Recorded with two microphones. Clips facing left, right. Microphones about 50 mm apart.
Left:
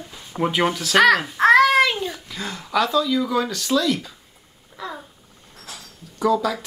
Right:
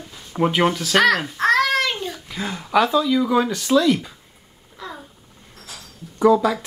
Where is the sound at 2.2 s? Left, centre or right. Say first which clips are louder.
Right 3 dB; centre.